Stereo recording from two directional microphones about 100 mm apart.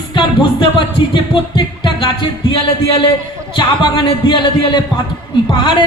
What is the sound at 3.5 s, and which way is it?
Speech, 55° left (ahead or behind).